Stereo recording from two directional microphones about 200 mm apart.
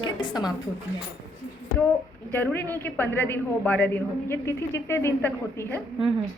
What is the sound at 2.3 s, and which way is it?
A man's voice, 10° left (ahead or behind).